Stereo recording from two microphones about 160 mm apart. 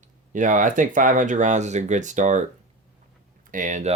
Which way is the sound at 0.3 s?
55° right (ahead or behind).